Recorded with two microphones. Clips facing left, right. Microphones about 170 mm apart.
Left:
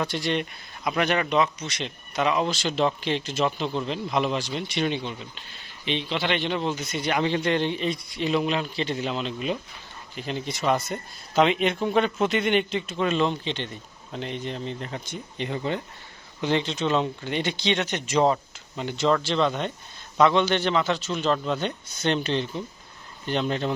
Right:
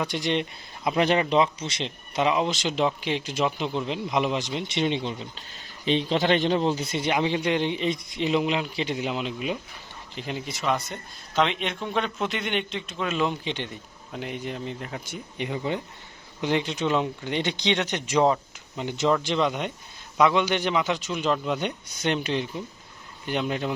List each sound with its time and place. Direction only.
0.0 s a man's voice: 15° right (ahead or behind)
5.8 s a man's voice: 40° right (ahead or behind); by 10.4 s 15° right (ahead or behind)
10.4 s a man's voice: centre (ahead or behind)